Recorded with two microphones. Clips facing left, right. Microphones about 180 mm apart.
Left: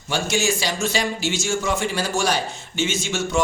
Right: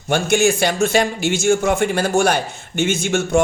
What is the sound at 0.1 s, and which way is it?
A man's voice, 55° right (ahead or behind).